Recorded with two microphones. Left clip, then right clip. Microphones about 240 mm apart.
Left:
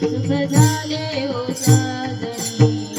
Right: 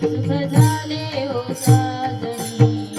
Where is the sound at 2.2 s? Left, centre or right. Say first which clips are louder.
Left 1 dB; left.